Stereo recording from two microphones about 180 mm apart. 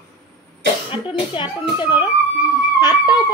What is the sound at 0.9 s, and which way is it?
A child's voice, 25° left (ahead or behind).